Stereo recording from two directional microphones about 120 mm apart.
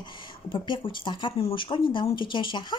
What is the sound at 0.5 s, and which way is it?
Speech, 45° left (ahead or behind).